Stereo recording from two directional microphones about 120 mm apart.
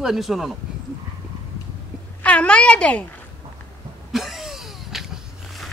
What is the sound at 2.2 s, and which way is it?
Speech, 10° left (ahead or behind).